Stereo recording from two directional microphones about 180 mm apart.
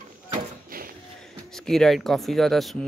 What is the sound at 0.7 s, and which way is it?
Music, 50° right (ahead or behind).